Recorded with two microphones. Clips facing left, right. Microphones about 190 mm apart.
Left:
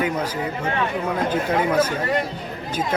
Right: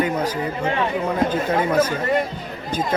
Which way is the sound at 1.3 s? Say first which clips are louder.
Right 1 dB; 10° left (ahead or behind).